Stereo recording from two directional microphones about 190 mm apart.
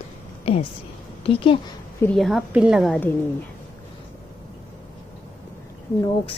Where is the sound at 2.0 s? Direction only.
5° left (ahead or behind).